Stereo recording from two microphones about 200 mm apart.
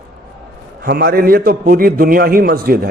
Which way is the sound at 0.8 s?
50° right (ahead or behind).